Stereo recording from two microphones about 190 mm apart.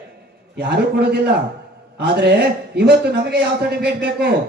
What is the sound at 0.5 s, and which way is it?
A man's voice, 60° right (ahead or behind).